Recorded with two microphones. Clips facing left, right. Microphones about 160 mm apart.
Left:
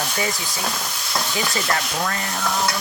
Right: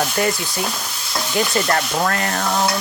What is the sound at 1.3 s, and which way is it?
Speech, 60° right (ahead or behind).